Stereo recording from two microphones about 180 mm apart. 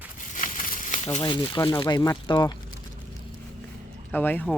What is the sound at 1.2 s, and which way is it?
Speech, 25° left (ahead or behind).